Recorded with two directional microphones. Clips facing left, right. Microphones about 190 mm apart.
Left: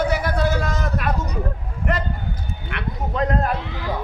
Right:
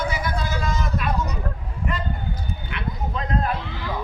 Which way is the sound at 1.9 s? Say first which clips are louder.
Left 5 dB; 85° left.